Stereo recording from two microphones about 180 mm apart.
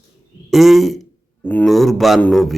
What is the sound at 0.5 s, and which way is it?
A man's voice, centre (ahead or behind).